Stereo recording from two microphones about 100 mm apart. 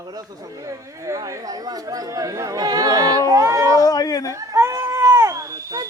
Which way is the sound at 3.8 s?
40° left (ahead or behind).